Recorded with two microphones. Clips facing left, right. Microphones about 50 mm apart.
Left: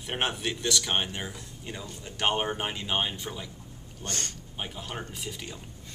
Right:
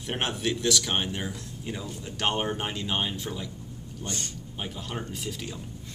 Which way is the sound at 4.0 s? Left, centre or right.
Left.